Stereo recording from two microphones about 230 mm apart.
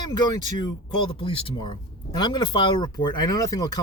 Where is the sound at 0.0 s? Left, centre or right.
Centre.